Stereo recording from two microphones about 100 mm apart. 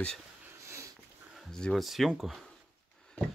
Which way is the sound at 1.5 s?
Centre (ahead or behind).